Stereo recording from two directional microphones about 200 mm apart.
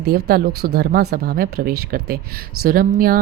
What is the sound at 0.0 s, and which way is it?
Speech, 50° right (ahead or behind).